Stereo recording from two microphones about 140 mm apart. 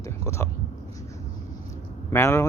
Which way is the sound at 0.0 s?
20° left (ahead or behind).